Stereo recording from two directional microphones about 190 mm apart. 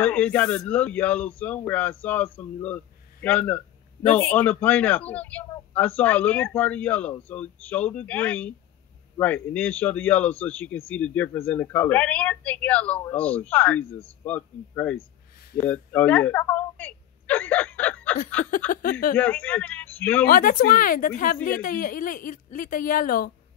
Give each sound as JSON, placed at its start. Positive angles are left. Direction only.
{"t": 0.0, "sound": "a man's voice", "side_deg": 10}
{"t": 18.7, "sound": "a woman's voice", "side_deg": 50}
{"t": 19.1, "sound": "a man's voice", "side_deg": 10}
{"t": 20.2, "sound": "a woman's voice", "side_deg": 45}